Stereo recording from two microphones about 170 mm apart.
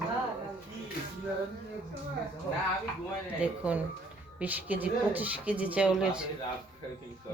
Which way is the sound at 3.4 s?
5° right (ahead or behind).